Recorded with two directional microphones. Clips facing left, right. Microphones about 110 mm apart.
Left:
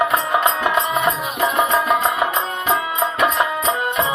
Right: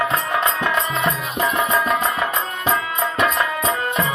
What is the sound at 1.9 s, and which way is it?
Music, 15° left (ahead or behind).